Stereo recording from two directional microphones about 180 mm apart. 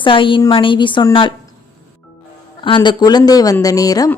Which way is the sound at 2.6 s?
25° left (ahead or behind).